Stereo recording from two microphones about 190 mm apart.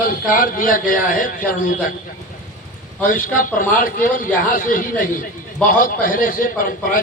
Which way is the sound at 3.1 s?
45° left (ahead or behind).